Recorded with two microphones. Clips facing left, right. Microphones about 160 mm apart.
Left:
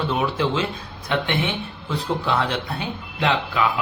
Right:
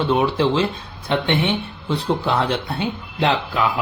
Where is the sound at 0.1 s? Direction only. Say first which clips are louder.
Right 6 dB; 30° right (ahead or behind).